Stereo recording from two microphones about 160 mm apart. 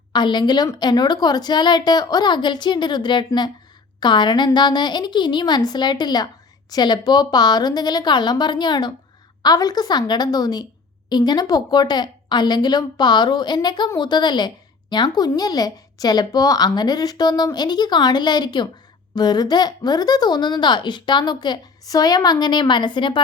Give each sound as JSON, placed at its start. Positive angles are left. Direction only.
{"t": 0.1, "sound": "a woman's voice", "side_deg": 30}